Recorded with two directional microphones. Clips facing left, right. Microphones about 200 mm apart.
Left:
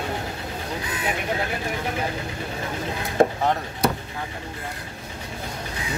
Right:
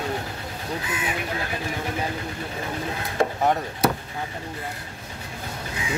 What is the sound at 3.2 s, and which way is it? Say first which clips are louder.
Chop: left 5 dB; 50° left (ahead or behind).